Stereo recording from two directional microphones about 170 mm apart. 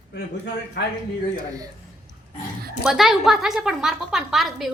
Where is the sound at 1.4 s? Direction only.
20° right (ahead or behind).